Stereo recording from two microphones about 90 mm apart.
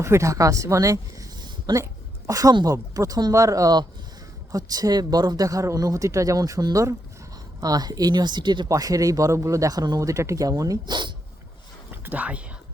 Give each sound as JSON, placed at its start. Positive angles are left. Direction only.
{"t": 0.0, "sound": "speech", "side_deg": -30}
{"t": 1.5, "sound": "a sound", "side_deg": -45}
{"t": 2.6, "sound": "speech", "side_deg": -40}
{"t": 8.7, "sound": "speech", "side_deg": -40}
{"t": 10.8, "sound": "speech", "side_deg": -60}
{"t": 11.9, "sound": "a sound", "side_deg": -20}